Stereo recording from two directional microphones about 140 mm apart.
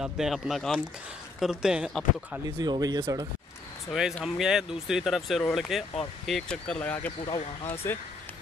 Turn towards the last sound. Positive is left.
turn(degrees=40)  # may be behind; listen again after turning